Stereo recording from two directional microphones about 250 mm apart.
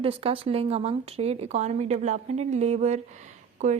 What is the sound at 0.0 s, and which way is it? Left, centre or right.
Speech, right.